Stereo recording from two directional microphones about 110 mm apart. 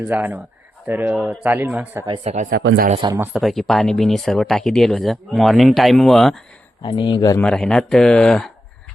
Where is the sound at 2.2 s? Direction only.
90° right.